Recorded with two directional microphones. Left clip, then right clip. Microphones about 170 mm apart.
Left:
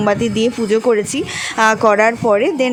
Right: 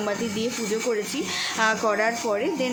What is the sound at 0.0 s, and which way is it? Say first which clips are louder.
A woman's voice: left 11 dB; 45° left (ahead or behind).